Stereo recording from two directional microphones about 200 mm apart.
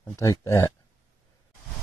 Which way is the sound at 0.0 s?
15° left (ahead or behind).